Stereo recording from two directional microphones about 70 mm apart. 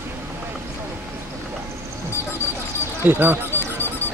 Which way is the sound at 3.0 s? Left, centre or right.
Right.